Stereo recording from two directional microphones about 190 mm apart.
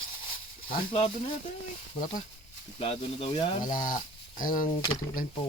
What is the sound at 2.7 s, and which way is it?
Speech, 30° left (ahead or behind).